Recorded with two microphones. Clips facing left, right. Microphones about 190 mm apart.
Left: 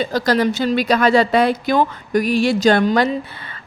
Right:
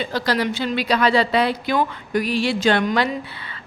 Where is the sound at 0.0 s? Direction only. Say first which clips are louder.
Left 5 dB; 40° left (ahead or behind).